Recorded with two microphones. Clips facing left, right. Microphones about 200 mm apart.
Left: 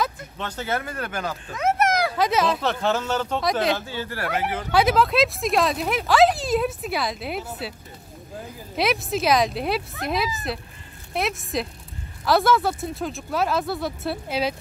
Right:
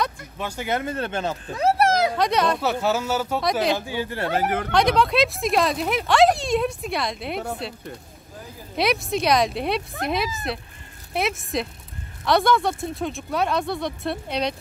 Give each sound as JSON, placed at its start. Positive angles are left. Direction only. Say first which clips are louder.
{"t": 0.4, "sound": "speech", "louder": "right 2 dB", "side_deg": -10}
{"t": 2.1, "sound": "speech", "louder": "even", "side_deg": 0}
{"t": 3.7, "sound": "speech", "louder": "right 3 dB", "side_deg": -15}
{"t": 4.4, "sound": "speech", "louder": "right 5 dB", "side_deg": -50}
{"t": 4.6, "sound": "speech", "louder": "left 3 dB", "side_deg": 5}
{"t": 8.7, "sound": "speech", "louder": "right 1 dB", "side_deg": 0}